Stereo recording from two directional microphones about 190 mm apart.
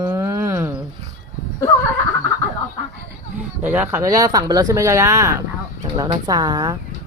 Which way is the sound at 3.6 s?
10° right (ahead or behind).